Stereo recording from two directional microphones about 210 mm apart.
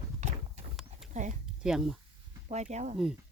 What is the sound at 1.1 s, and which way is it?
Speech, 35° right (ahead or behind).